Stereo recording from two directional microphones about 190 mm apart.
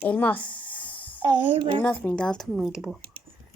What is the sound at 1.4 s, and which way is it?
Speech, 25° right (ahead or behind).